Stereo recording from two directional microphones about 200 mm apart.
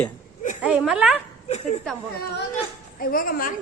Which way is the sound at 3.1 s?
45° left (ahead or behind).